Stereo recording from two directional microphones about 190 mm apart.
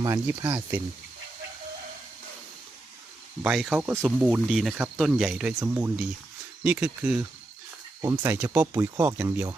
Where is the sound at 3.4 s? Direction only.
5° right (ahead or behind).